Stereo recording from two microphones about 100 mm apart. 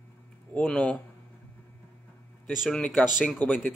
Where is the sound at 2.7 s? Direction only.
10° left (ahead or behind).